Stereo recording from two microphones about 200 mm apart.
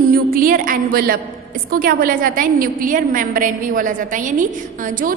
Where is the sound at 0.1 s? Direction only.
45° right (ahead or behind).